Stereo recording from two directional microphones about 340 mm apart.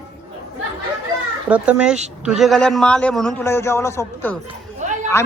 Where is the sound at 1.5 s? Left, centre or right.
Centre.